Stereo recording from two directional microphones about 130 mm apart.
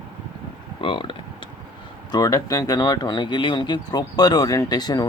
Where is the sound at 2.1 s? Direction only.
25° left (ahead or behind).